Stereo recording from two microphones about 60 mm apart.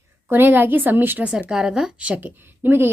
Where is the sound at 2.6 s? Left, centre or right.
Right.